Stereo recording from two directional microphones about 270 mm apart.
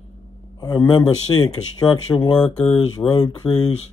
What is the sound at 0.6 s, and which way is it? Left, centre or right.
Speech, centre.